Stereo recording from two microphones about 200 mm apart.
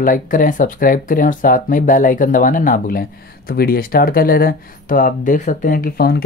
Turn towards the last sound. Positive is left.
turn(degrees=50)  # may be behind; listen again after turning